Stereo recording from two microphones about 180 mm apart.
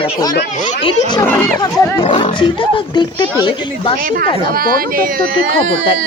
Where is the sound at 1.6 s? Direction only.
20° left (ahead or behind).